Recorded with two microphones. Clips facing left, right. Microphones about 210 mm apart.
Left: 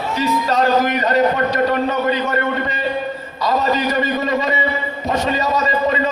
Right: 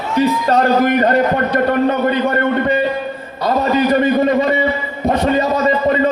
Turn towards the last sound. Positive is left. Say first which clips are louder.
# right 4 dB
turn(degrees=-55)  # may be behind; listen again after turning